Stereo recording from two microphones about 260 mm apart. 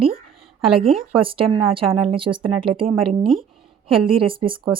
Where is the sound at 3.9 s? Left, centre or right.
Right.